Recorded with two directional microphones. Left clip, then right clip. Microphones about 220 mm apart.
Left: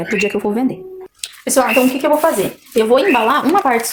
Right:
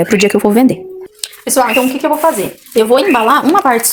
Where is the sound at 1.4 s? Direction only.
25° right (ahead or behind).